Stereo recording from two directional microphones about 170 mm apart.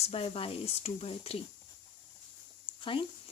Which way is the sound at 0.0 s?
35° left (ahead or behind).